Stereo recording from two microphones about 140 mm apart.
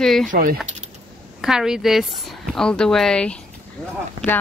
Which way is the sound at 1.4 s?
5° right (ahead or behind).